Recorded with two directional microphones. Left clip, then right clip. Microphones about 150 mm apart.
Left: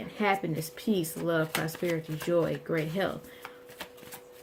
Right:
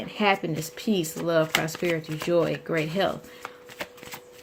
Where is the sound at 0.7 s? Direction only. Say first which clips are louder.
Right 3 dB; 40° right (ahead or behind).